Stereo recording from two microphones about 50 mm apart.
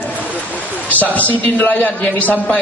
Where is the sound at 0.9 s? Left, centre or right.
Left.